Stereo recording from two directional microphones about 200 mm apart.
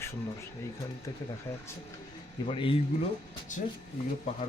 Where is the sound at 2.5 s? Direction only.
25° left (ahead or behind).